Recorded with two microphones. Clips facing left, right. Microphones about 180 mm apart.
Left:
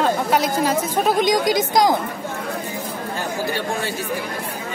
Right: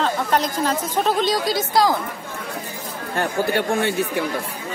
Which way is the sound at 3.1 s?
60° right (ahead or behind).